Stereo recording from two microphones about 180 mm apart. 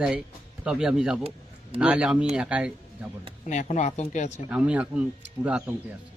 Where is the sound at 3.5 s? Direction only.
40° left (ahead or behind).